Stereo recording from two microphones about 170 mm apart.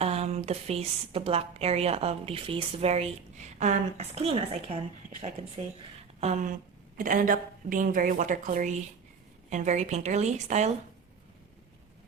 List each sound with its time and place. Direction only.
0.0 s a woman's voice: 40° right (ahead or behind)
6.1 s a woman's voice: 45° right (ahead or behind)